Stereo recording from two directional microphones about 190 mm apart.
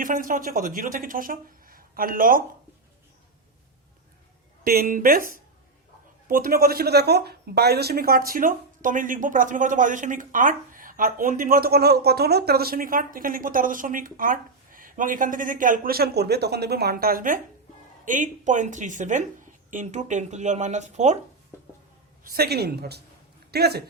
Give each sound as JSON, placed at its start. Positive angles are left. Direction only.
{"t": 0.0, "sound": "speech", "side_deg": -45}
{"t": 4.6, "sound": "speech", "side_deg": -50}
{"t": 22.2, "sound": "a man's voice", "side_deg": -50}